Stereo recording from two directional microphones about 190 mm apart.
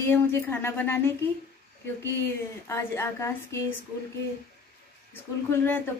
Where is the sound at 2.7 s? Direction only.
15° left (ahead or behind).